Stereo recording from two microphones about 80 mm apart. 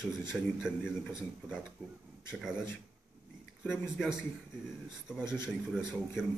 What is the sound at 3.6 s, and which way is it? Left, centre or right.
Speech, left.